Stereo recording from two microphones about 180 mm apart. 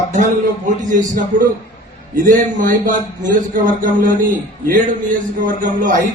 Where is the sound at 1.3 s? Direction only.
45° right (ahead or behind).